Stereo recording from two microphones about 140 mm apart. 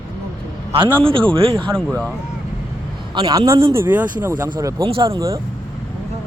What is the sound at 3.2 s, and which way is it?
Speech, 30° right (ahead or behind).